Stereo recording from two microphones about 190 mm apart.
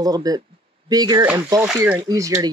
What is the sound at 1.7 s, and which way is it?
Speech, 5° right (ahead or behind).